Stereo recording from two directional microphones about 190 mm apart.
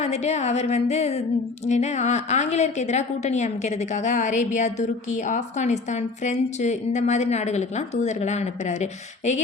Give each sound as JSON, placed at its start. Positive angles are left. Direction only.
{"t": 0.0, "sound": "a woman's voice", "side_deg": 35}